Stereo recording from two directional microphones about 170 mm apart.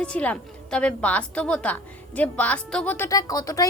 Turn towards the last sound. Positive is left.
turn(degrees=20)  # may be behind; listen again after turning